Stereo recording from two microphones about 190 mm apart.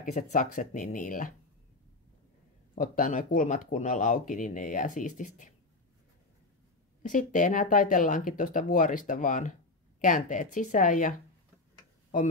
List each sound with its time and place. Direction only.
0.0 s speech: 40° left (ahead or behind)
2.7 s speech: 45° left (ahead or behind)
7.0 s speech: 45° left (ahead or behind)